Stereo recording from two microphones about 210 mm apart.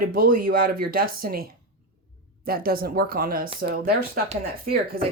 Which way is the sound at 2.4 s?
45° right (ahead or behind).